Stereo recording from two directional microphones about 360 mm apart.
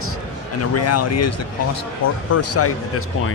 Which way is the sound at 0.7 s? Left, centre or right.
Left.